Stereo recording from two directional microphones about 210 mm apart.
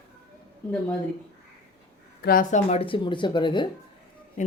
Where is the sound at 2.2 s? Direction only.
45° left (ahead or behind); by 3.7 s 20° left (ahead or behind).